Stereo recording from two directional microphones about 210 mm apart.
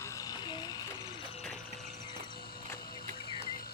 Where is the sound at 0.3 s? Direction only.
20° left (ahead or behind).